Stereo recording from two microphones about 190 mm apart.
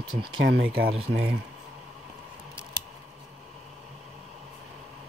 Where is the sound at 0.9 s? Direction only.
30° right (ahead or behind).